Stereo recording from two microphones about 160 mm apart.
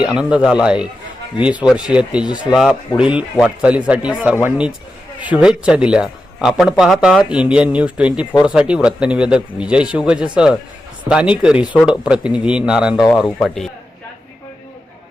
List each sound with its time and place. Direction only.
0.2 s a man's voice: 5° right (ahead or behind)